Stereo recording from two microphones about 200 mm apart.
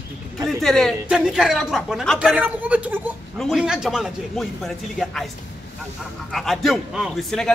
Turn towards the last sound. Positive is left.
turn(degrees=0)  # may be behind; listen again after turning